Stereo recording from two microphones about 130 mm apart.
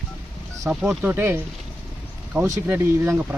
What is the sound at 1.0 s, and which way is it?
Speech, 15° right (ahead or behind).